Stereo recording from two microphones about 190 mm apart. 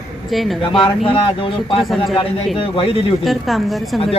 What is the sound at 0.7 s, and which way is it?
A man's voice, 25° left (ahead or behind).